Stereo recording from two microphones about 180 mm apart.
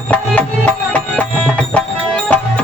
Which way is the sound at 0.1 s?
10° left (ahead or behind).